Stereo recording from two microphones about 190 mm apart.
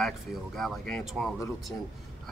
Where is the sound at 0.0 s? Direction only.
Centre (ahead or behind).